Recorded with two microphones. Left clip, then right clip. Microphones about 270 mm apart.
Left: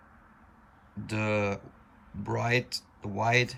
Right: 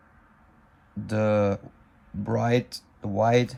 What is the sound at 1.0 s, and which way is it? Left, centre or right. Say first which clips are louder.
Speech: right 6 dB; centre.